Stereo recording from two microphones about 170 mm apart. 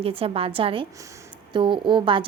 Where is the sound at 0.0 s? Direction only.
35° right (ahead or behind).